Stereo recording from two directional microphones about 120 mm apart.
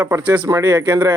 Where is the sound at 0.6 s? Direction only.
35° right (ahead or behind).